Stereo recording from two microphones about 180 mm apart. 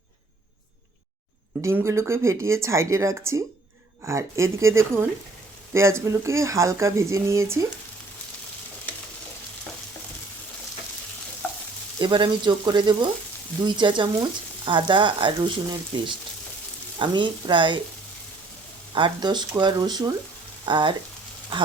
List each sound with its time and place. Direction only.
1.6 s speech: 15° right (ahead or behind)
11.4 s stir: 10° left (ahead or behind)
11.9 s speech: 25° right (ahead or behind)
18.9 s speech: 25° right (ahead or behind)